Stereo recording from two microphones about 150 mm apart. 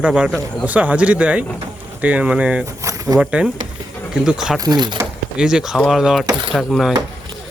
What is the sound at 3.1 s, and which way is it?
Speech, 5° right (ahead or behind).